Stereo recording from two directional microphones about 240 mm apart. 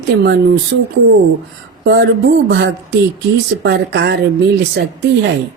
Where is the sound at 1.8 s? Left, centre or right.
Right.